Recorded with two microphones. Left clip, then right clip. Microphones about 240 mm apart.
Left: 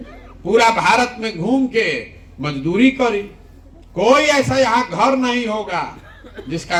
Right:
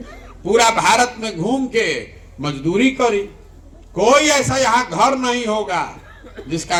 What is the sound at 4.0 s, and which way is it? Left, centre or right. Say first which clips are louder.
A man's voice: even; right.